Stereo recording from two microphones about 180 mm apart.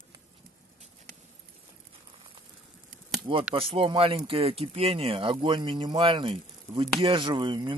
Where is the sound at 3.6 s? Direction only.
30° right (ahead or behind).